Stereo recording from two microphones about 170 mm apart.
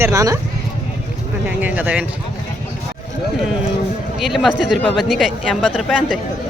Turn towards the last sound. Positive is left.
turn(degrees=-5)  # may be behind; listen again after turning